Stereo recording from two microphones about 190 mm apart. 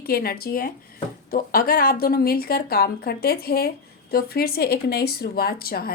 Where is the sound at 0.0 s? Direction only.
55° left (ahead or behind).